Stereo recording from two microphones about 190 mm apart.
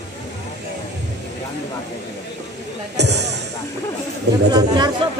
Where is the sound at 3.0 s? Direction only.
65° right (ahead or behind).